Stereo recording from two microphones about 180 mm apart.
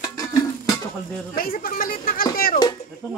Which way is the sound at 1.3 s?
55° left (ahead or behind).